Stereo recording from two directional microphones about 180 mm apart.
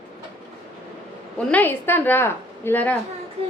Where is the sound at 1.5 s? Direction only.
10° left (ahead or behind).